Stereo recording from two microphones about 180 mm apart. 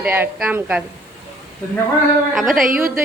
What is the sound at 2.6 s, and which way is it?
Speech, 50° right (ahead or behind).